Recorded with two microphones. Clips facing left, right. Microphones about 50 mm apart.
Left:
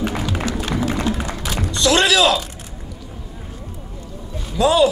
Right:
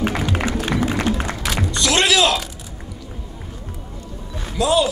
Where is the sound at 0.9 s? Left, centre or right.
Right.